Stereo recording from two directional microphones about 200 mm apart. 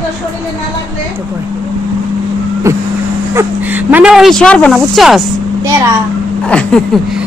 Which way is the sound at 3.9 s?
5° right (ahead or behind).